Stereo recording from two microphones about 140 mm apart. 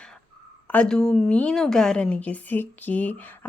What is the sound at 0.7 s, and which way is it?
A woman's voice, 5° left (ahead or behind).